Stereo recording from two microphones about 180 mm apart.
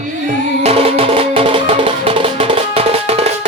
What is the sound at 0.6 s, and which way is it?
Music, 35° right (ahead or behind).